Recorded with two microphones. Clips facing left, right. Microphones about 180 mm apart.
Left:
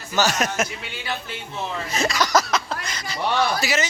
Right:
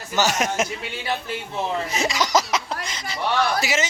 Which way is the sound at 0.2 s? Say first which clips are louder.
Even; 20° right (ahead or behind).